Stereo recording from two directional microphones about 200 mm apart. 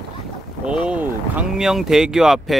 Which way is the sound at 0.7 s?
5° right (ahead or behind).